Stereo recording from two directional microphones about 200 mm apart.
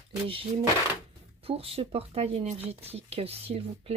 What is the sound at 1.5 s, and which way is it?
Speech, 30° right (ahead or behind).